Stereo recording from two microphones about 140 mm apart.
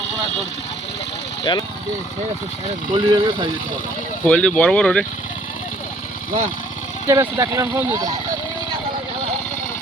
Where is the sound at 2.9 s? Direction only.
30° right (ahead or behind).